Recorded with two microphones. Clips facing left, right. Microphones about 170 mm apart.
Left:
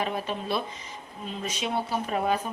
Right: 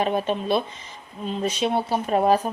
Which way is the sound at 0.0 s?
25° right (ahead or behind).